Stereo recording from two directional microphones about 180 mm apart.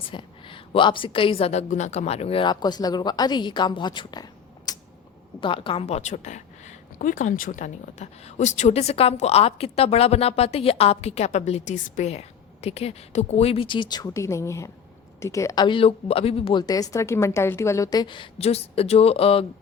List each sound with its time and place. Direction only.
0.1 s a woman's voice: 30° left (ahead or behind)